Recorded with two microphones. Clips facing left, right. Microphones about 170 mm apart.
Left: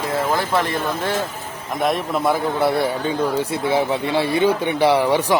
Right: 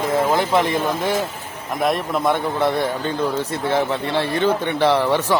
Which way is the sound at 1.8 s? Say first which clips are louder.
Even; centre (ahead or behind).